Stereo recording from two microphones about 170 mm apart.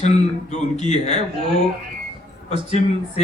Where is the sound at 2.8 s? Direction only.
45° left (ahead or behind).